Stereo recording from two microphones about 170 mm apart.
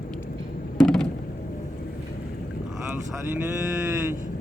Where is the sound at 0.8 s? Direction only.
5° left (ahead or behind).